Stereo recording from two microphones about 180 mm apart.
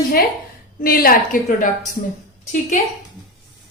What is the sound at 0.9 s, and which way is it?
Speech, 55° left (ahead or behind).